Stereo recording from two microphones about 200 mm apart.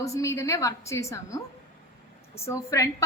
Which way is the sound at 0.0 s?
15° left (ahead or behind).